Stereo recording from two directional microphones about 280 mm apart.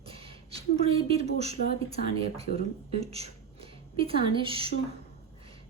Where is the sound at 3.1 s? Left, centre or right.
Right.